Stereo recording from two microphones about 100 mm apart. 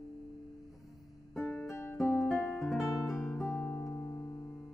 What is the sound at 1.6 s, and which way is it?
Music, 25° left (ahead or behind).